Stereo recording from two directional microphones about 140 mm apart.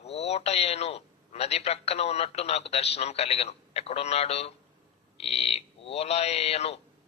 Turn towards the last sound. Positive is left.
turn(degrees=50)  # may be behind; listen again after turning